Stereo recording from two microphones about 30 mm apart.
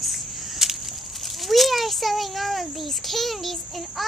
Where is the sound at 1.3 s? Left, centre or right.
Centre.